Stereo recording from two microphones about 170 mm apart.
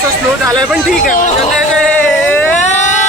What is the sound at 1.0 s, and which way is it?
Speech, 50° left (ahead or behind).